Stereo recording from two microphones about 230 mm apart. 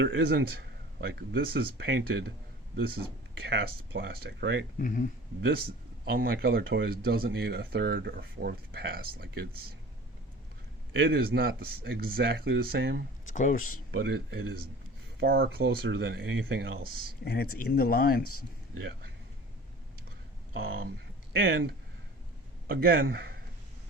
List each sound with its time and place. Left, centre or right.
0.0 s speech: right
4.8 s speech: left
5.4 s speech: right
10.9 s speech: right
13.3 s speech: left
13.9 s speech: right
17.2 s speech: left
18.2 s a man's voice: left
20.5 s speech: right
22.8 s speech: right